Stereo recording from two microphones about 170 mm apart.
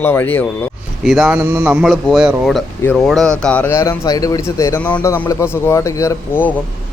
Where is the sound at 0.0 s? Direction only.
10° left (ahead or behind).